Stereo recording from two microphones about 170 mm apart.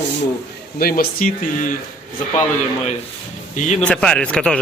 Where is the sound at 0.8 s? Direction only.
60° left (ahead or behind).